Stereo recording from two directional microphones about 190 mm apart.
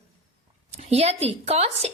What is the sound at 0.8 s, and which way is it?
A woman's voice, 35° right (ahead or behind).